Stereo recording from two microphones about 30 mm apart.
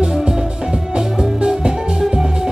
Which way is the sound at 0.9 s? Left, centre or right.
Right.